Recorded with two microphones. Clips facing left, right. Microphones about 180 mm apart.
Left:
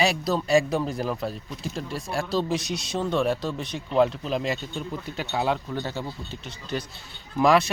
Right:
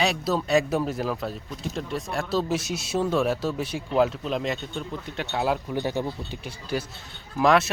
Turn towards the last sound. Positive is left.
turn(degrees=0)  # may be behind; listen again after turning